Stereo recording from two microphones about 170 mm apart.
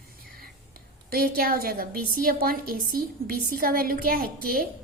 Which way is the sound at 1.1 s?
60° right (ahead or behind).